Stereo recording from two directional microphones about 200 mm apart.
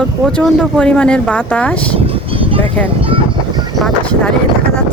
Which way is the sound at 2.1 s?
25° right (ahead or behind).